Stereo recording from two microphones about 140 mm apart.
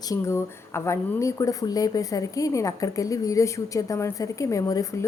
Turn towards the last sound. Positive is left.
turn(degrees=25)  # may be behind; listen again after turning